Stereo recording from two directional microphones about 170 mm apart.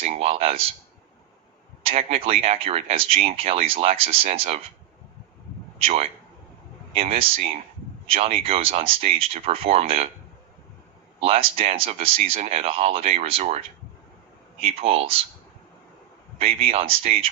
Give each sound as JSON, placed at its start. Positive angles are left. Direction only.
{"t": 0.0, "sound": "speech", "side_deg": -35}
{"t": 1.8, "sound": "speech", "side_deg": -35}
{"t": 5.8, "sound": "speech", "side_deg": -35}
{"t": 11.2, "sound": "speech", "side_deg": -35}
{"t": 16.4, "sound": "speech", "side_deg": -35}